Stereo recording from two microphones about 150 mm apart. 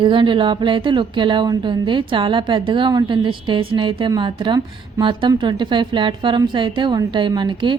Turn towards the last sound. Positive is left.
turn(degrees=-30)  # may be behind; listen again after turning